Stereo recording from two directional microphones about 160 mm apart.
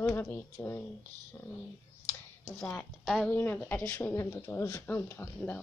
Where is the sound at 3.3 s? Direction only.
15° left (ahead or behind).